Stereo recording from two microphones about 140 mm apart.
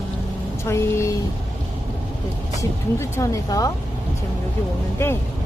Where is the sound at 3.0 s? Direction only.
25° left (ahead or behind).